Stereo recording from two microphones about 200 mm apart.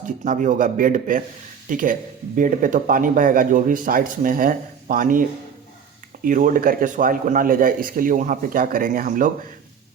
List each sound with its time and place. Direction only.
0.3 s a man's voice: 40° right (ahead or behind)
6.2 s speech: 45° right (ahead or behind)